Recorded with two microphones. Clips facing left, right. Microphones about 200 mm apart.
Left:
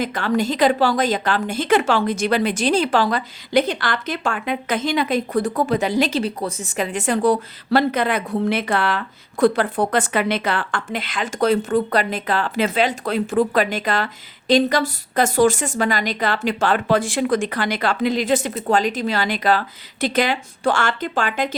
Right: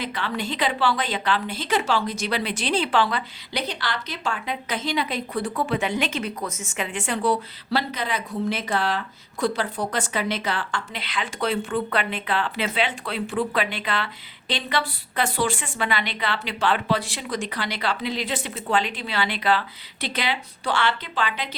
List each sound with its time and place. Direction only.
0.0 s a woman's voice: 45° left (ahead or behind)